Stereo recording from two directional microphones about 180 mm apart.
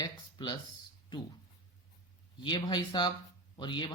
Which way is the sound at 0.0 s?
25° left (ahead or behind).